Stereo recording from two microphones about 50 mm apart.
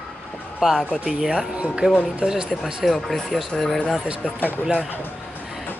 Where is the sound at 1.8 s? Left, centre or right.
Right.